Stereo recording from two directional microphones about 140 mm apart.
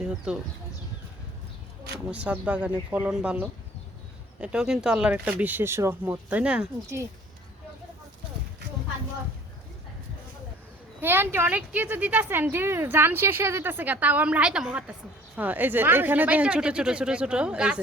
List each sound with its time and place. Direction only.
0.0 s speech: 5° right (ahead or behind)
2.0 s speech: 10° right (ahead or behind)
11.0 s speech: 15° right (ahead or behind)